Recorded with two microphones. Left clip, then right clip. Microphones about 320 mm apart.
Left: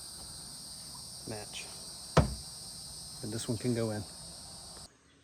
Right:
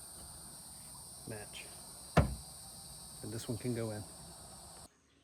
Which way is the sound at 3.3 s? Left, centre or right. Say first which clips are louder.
Left 6 dB; left.